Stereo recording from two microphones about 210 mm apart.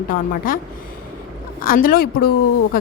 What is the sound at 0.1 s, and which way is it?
Speech, 40° left (ahead or behind).